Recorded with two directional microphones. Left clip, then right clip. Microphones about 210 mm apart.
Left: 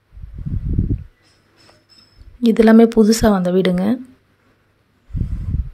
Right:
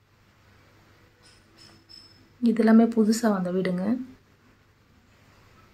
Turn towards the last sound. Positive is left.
turn(degrees=40)  # may be behind; listen again after turning